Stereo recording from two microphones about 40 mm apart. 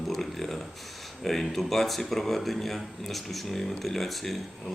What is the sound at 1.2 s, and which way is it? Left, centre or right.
Speech, centre.